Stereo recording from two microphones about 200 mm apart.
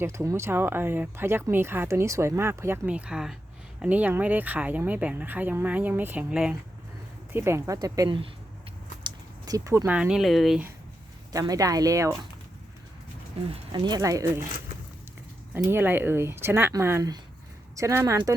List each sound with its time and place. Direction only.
0.0 s speech: 15° right (ahead or behind)
11.3 s speech: 15° right (ahead or behind)
13.5 s speech: 20° right (ahead or behind)
15.6 s speech: 10° right (ahead or behind)